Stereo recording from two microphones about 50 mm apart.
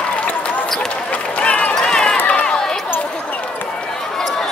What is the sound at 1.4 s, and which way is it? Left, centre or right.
Run, left.